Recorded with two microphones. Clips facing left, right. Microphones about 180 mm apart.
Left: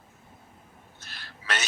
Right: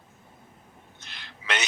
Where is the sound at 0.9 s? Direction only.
20° right (ahead or behind).